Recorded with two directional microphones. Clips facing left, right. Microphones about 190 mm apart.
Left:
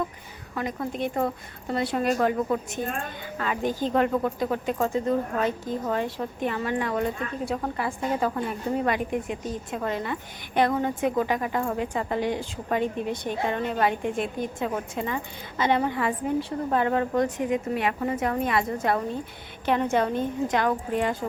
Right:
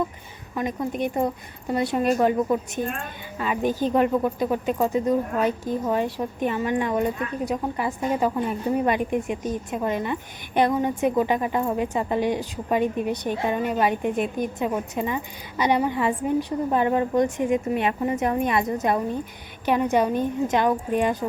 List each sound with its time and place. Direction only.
0.5 s a woman's voice: 20° right (ahead or behind)